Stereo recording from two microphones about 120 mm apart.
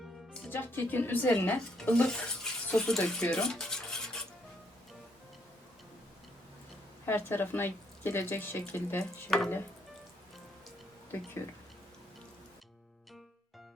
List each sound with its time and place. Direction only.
0.5 s speech: 15° left (ahead or behind)
7.0 s speech: 20° left (ahead or behind)